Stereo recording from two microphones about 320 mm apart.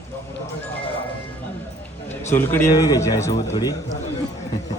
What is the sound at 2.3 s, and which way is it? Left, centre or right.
A man's voice, centre.